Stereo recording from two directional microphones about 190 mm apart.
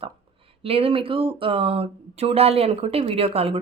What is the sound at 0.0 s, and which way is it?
Speech, 30° right (ahead or behind).